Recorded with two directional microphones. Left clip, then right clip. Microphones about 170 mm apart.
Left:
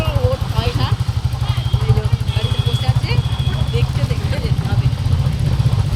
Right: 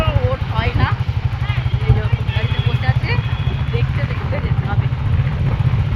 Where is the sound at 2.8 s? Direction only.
Centre (ahead or behind).